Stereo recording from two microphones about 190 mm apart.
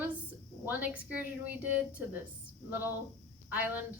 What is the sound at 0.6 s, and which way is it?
Speech, 10° right (ahead or behind).